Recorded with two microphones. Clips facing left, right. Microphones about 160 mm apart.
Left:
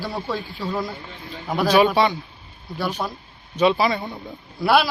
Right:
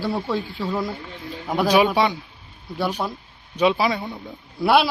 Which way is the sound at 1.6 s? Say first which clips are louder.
Left 1 dB; 10° right (ahead or behind).